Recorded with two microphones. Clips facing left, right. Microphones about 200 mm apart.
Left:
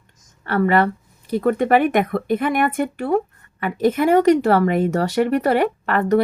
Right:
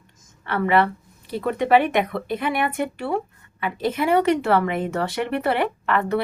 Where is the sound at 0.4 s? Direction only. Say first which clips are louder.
Left 3 dB; 40° left (ahead or behind).